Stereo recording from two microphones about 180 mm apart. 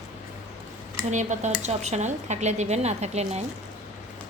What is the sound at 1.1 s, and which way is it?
Speech, 40° right (ahead or behind).